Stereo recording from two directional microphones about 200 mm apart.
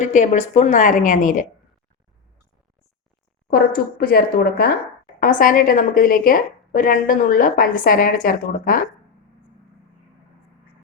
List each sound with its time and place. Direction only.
0.0 s a woman's voice: 35° left (ahead or behind)
3.5 s a woman's voice: 50° left (ahead or behind)